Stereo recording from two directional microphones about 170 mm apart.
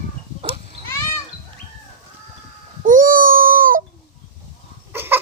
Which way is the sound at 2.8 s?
55° right (ahead or behind).